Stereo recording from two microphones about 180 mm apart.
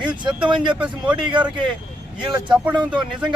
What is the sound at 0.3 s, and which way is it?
Speech, 5° right (ahead or behind).